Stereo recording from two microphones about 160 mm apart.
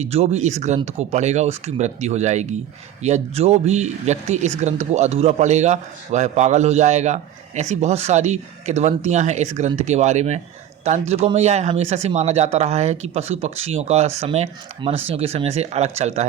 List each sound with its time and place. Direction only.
0.0 s a man's voice: 40° right (ahead or behind)